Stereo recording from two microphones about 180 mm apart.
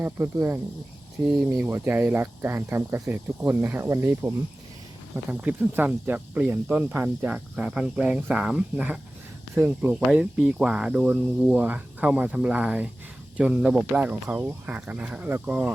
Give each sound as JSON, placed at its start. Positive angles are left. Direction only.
{"t": 0.0, "sound": "speech", "side_deg": -15}